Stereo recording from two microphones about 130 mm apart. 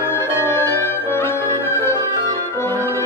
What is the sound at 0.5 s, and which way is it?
Music, 15° left (ahead or behind).